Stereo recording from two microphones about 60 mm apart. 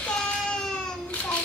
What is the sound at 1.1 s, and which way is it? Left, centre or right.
Child singing, left.